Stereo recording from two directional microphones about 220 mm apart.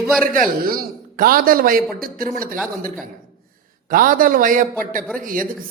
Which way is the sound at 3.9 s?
40° right (ahead or behind).